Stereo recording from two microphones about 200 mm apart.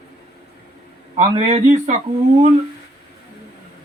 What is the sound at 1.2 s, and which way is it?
Speech, 35° right (ahead or behind).